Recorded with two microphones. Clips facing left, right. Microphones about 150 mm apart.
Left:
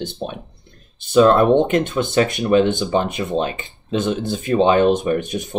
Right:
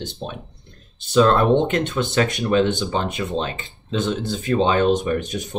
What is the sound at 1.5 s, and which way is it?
Speech, 50° left (ahead or behind).